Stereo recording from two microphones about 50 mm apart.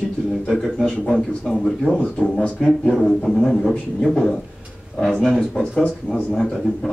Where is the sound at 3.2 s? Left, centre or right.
Centre.